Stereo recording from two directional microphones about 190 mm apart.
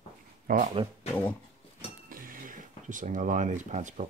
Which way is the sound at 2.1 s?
45° right (ahead or behind).